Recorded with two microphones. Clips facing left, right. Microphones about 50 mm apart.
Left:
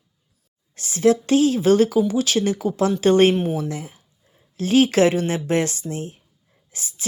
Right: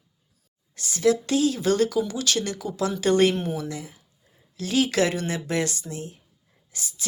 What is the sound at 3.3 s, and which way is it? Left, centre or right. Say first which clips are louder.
Speech: left 6 dB; centre.